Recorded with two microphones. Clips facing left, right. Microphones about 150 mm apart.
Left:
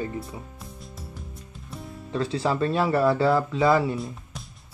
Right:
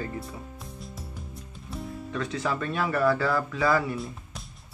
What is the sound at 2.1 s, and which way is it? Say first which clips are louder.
Speech: left 5 dB; 30° left (ahead or behind).